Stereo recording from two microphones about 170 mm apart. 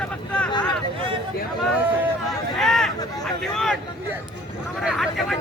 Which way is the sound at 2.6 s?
5° left (ahead or behind).